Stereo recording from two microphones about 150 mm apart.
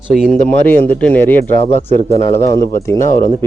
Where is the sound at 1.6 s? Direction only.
45° left (ahead or behind).